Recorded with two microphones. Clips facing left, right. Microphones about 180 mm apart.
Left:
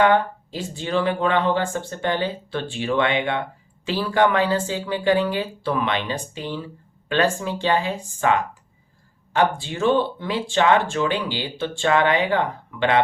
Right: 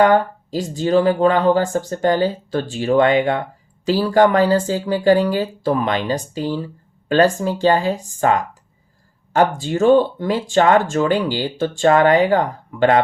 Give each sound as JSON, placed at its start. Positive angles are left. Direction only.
{"t": 0.0, "sound": "speech", "side_deg": -40}